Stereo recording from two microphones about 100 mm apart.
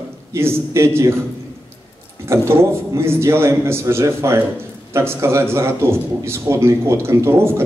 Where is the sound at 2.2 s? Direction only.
25° right (ahead or behind).